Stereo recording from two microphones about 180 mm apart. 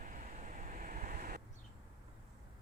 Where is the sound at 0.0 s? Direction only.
50° right (ahead or behind).